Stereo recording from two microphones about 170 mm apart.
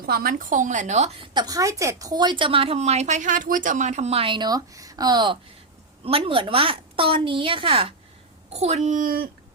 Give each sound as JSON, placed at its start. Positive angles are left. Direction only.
{"t": 0.0, "sound": "a woman's voice", "side_deg": -60}
{"t": 1.3, "sound": "a woman's voice", "side_deg": -25}